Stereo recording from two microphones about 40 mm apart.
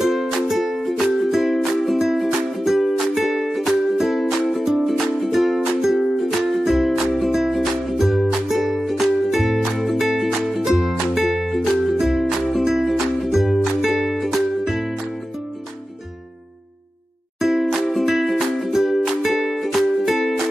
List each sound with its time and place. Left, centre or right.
0.0 s music: centre
6.9 s music: centre
7.2 s music: centre
17.4 s music: centre